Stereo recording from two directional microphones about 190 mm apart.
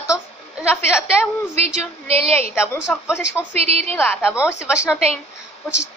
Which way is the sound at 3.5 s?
35° right (ahead or behind).